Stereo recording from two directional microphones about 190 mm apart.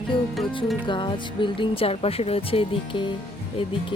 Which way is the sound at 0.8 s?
25° left (ahead or behind).